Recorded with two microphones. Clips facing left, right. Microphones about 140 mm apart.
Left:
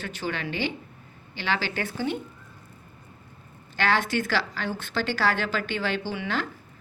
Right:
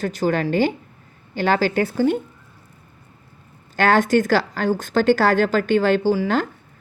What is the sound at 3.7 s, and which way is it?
A woman's voice, 45° right (ahead or behind).